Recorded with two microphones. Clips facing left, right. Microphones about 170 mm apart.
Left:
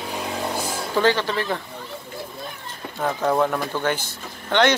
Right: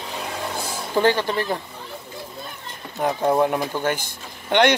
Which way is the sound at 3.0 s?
15° right (ahead or behind).